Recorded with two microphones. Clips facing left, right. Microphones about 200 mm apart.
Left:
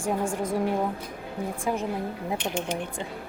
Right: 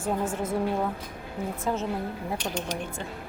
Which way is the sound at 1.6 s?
15° left (ahead or behind).